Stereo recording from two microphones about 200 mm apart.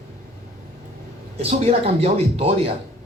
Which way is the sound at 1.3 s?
30° right (ahead or behind).